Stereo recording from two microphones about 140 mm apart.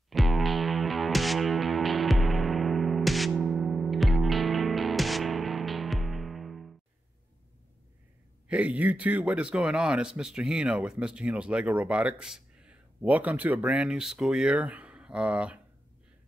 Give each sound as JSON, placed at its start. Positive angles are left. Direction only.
{"t": 0.1, "sound": "music", "side_deg": 0}
{"t": 8.5, "sound": "speech", "side_deg": -10}